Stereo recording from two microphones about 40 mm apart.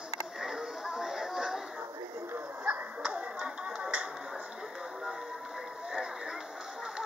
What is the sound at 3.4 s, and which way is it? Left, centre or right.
Music, centre.